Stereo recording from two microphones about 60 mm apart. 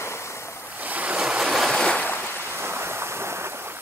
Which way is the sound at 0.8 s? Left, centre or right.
Right.